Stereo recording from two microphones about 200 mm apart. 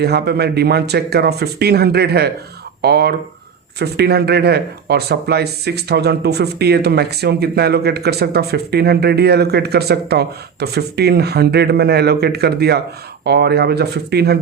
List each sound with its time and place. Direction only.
0.0 s speech: 55° right (ahead or behind)